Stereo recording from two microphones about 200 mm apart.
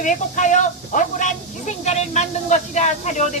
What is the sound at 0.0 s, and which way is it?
Speech, 40° left (ahead or behind).